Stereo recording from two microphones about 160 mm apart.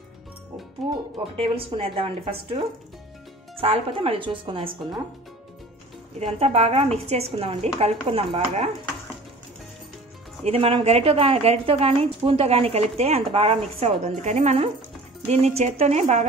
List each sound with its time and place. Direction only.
1.4 s a woman's voice: 35° right (ahead or behind)
3.5 s a woman's voice: 35° right (ahead or behind)
6.1 s a woman's voice: 40° right (ahead or behind)
10.4 s a woman's voice: 35° right (ahead or behind)